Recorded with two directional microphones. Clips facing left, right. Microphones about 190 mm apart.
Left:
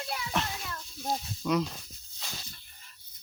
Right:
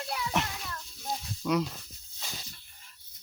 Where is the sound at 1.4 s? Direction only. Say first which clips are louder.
Even; 5° right (ahead or behind).